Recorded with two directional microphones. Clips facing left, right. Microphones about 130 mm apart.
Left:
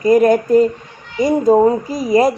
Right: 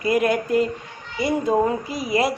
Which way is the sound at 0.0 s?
40° left (ahead or behind).